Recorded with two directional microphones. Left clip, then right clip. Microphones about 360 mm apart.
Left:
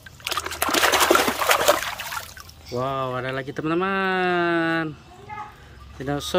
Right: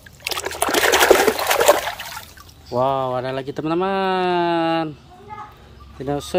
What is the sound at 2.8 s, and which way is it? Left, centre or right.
Speech, centre.